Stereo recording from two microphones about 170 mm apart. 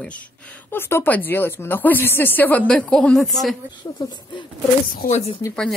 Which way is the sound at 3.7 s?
25° left (ahead or behind).